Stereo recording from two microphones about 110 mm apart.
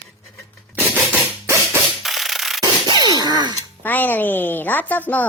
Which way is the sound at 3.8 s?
15° left (ahead or behind).